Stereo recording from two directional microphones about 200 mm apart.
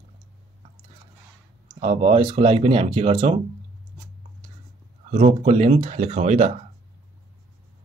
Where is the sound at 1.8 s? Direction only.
30° right (ahead or behind).